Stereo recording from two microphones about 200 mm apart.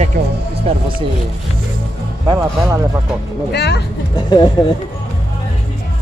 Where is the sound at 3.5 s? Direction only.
55° left (ahead or behind).